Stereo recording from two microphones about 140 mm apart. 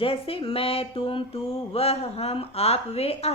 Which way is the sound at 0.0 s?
40° left (ahead or behind).